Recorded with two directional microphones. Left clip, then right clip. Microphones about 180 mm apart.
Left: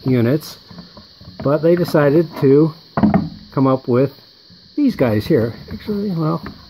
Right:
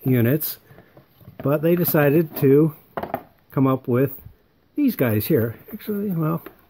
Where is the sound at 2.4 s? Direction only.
35° right (ahead or behind).